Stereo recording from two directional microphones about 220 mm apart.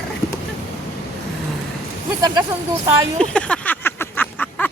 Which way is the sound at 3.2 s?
5° left (ahead or behind).